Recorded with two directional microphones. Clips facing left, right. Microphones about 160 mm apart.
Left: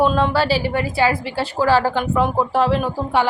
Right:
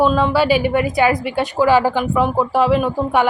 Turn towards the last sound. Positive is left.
turn(degrees=-10)  # may be behind; listen again after turning